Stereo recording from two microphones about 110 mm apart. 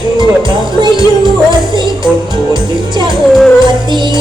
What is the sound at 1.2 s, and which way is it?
Music, 45° right (ahead or behind).